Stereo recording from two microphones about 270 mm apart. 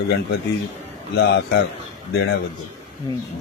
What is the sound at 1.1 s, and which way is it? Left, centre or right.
Speech, left.